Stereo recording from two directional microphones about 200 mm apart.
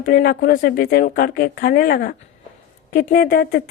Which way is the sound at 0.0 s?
45° left (ahead or behind).